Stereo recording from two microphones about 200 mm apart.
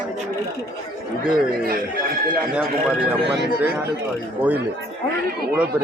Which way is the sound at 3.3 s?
60° right (ahead or behind).